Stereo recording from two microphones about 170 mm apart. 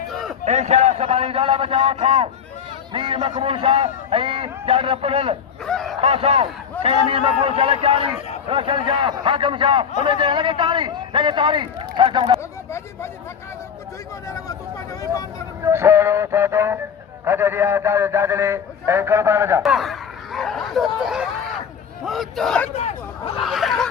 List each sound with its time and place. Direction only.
0.1 s a sound: centre (ahead or behind)
0.4 s a man's voice: 40° right (ahead or behind)
5.6 s a sound: centre (ahead or behind)
6.0 s a man's voice: 35° right (ahead or behind)
12.4 s speech: 15° left (ahead or behind)
14.3 s speech: 20° left (ahead or behind)
15.6 s a man's voice: 15° right (ahead or behind)
19.6 s a sound: centre (ahead or behind)
22.0 s a man's voice: centre (ahead or behind)
22.7 s hubbub: 40° left (ahead or behind)
23.4 s snicker: centre (ahead or behind)